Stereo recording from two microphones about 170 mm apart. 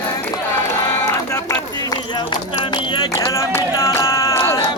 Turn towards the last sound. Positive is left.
turn(degrees=15)  # may be behind; listen again after turning